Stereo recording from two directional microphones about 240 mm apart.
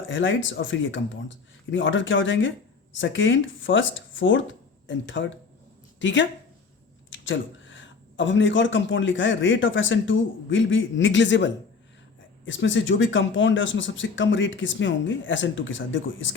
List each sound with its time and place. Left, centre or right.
0.0 s speech: left